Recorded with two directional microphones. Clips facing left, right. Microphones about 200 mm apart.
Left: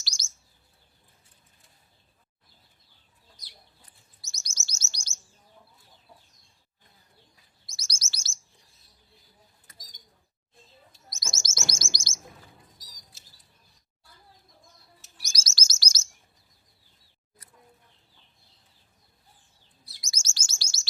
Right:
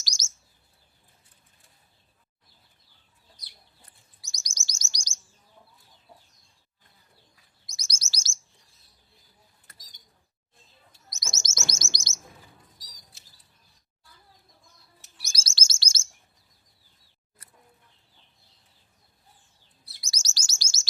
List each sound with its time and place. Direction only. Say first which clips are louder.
0.0 s chirp: right 2 dB; 45° right (ahead or behind)
4.2 s chirp: right 1 dB; 15° right (ahead or behind)
7.7 s chirp: right 1 dB; 15° right (ahead or behind)
11.1 s bird: even; 20° right (ahead or behind)
11.8 s chirp: left 1 dB; 20° right (ahead or behind)
15.3 s chirp: even; 30° right (ahead or behind)
20.0 s chirp: right 1 dB; 35° right (ahead or behind)